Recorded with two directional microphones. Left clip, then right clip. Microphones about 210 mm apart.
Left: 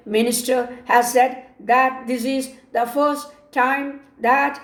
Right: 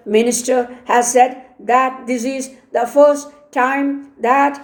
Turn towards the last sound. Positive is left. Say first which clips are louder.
# right 4 dB
turn(degrees=-40)  # may be behind; listen again after turning